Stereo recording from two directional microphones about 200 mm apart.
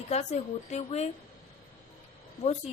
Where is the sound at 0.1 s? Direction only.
35° left (ahead or behind).